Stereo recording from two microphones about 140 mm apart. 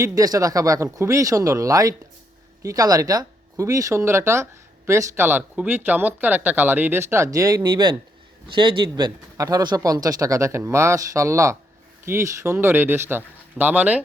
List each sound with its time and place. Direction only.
0.0 s speech: 25° right (ahead or behind)